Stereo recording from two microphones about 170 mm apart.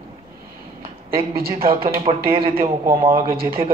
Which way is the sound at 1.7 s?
35° right (ahead or behind).